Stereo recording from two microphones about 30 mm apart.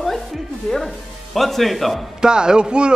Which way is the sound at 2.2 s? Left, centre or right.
Right.